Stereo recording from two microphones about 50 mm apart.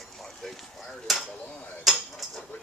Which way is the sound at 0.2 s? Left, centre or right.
Centre.